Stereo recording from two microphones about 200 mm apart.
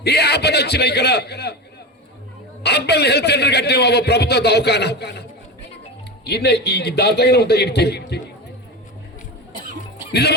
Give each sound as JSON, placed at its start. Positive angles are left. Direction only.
{"t": 0.0, "sound": "a man's voice", "side_deg": 55}
{"t": 2.6, "sound": "a man's voice", "side_deg": 55}
{"t": 6.2, "sound": "a man's voice", "side_deg": 55}
{"t": 10.1, "sound": "speech", "side_deg": 55}